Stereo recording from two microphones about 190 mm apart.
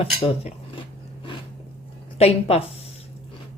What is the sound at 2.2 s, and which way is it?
Speech, 35° left (ahead or behind).